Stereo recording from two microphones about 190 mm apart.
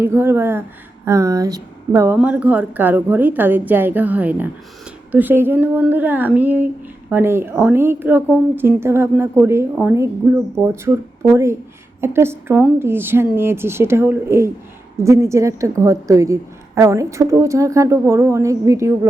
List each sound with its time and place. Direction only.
0.0 s a woman's voice: 15° right (ahead or behind)